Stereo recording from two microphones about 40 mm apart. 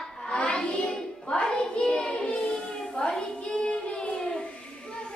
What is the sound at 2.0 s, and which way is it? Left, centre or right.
Child singing, left.